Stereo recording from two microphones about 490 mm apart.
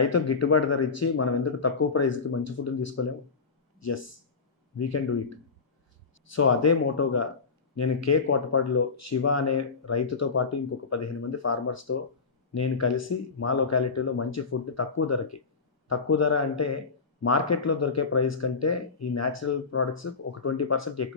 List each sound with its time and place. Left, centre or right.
0.1 s speech: left
4.8 s speech: left
6.3 s speech: left